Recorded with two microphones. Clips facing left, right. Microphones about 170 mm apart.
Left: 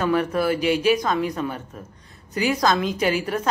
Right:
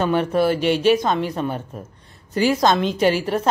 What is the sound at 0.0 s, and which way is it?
A woman's voice, 25° right (ahead or behind).